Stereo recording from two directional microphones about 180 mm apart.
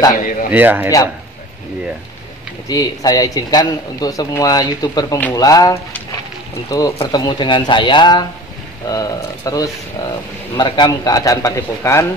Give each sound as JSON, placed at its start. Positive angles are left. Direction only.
{"t": 0.1, "sound": "speech", "side_deg": 45}
{"t": 0.5, "sound": "speech", "side_deg": -10}
{"t": 2.7, "sound": "a man's voice", "side_deg": 20}